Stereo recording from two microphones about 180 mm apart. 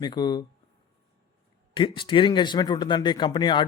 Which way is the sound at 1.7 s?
30° left (ahead or behind).